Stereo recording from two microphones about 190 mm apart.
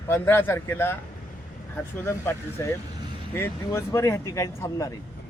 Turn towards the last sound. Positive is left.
turn(degrees=15)  # may be behind; listen again after turning